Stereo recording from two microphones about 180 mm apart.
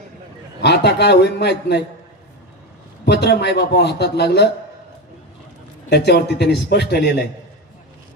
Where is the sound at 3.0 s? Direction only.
65° left (ahead or behind).